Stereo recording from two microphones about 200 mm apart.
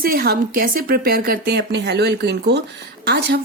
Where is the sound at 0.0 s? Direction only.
50° right (ahead or behind).